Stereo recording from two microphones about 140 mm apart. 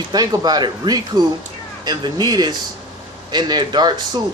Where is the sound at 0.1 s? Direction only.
30° right (ahead or behind).